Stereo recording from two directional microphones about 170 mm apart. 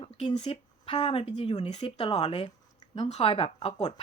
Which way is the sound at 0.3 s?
35° left (ahead or behind).